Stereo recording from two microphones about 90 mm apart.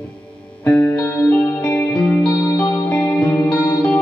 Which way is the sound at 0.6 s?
15° left (ahead or behind).